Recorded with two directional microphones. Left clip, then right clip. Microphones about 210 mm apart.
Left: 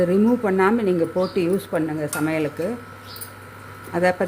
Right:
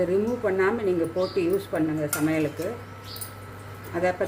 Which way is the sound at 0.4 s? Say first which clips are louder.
Left 4 dB; 45° left (ahead or behind).